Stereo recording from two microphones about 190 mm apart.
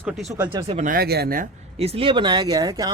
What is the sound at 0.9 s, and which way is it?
Speech, 55° right (ahead or behind).